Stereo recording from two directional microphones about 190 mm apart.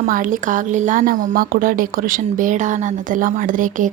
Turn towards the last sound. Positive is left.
turn(degrees=-45)  # may be behind; listen again after turning